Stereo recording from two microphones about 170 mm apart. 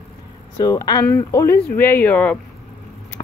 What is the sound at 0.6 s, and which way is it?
Speech, 20° left (ahead or behind).